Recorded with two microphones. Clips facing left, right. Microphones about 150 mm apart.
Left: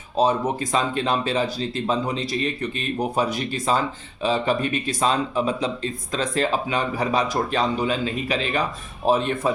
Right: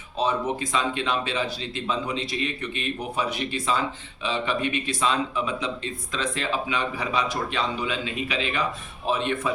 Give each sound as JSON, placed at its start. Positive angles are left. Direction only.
{"t": 0.2, "sound": "speech", "side_deg": 40}